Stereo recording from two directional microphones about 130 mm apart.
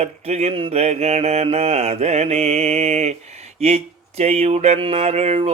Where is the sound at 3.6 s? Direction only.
55° right (ahead or behind).